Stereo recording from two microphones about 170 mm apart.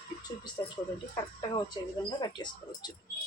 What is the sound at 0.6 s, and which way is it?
Speech, 25° left (ahead or behind).